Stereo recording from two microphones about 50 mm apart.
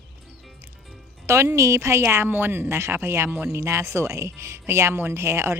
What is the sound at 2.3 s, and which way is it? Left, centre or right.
A woman's voice, right.